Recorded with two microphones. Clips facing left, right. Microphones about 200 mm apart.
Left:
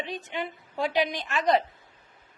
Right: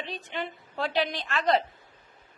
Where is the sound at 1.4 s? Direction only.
Centre (ahead or behind).